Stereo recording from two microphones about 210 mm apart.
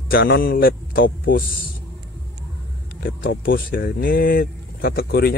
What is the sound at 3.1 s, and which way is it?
Speech, 60° left (ahead or behind).